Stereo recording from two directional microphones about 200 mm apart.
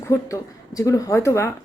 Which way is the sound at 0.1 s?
15° left (ahead or behind).